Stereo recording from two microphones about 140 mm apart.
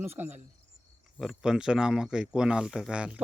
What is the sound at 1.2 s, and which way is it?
Speech, 5° right (ahead or behind).